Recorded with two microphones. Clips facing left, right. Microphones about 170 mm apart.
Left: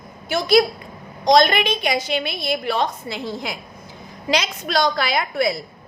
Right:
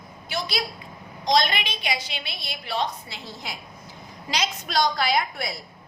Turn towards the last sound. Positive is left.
turn(degrees=75)  # may be behind; listen again after turning